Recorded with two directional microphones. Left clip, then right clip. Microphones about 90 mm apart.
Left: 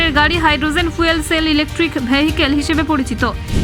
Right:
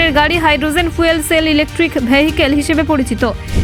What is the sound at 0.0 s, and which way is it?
Speech, 35° right (ahead or behind).